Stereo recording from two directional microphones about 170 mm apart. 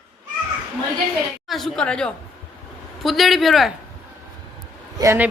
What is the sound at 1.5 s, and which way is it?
A man's voice, centre (ahead or behind).